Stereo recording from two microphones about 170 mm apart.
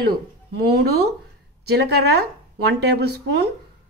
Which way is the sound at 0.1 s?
70° right (ahead or behind).